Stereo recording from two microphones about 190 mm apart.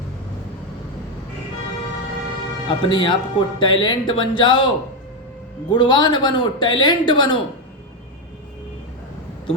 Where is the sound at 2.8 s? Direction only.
25° left (ahead or behind).